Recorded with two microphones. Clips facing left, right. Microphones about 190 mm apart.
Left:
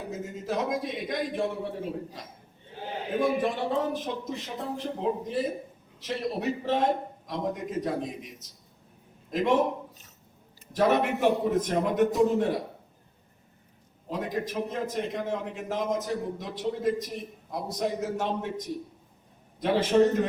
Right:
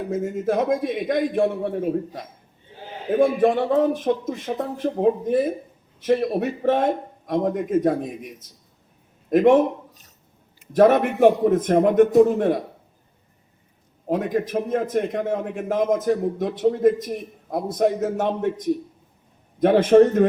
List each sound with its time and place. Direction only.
0.1 s a man's voice: 55° right (ahead or behind)
10.7 s a man's voice: 55° right (ahead or behind)
14.1 s a man's voice: 55° right (ahead or behind)
19.5 s a man's voice: 55° right (ahead or behind)